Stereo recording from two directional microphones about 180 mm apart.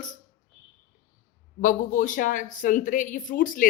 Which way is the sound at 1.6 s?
45° left (ahead or behind).